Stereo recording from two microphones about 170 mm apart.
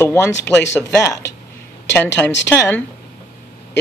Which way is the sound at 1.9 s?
10° left (ahead or behind).